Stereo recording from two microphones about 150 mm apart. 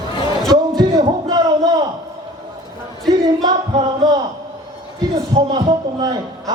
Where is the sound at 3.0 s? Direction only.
25° right (ahead or behind).